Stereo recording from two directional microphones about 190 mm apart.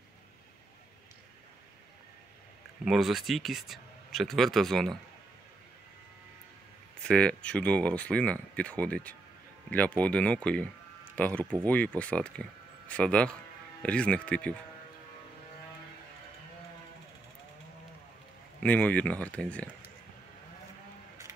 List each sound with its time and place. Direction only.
2.8 s speech: centre (ahead or behind)
7.0 s speech: 5° left (ahead or behind)
18.6 s speech: 10° left (ahead or behind)